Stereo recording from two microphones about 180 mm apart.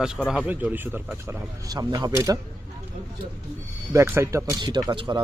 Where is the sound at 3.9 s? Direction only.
15° right (ahead or behind).